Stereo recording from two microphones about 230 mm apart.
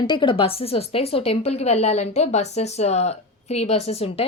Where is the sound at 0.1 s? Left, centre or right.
Centre.